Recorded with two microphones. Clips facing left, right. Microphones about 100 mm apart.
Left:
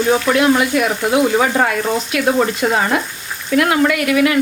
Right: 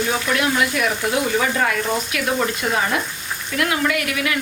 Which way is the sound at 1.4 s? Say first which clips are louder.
Left 5 dB; 45° left (ahead or behind).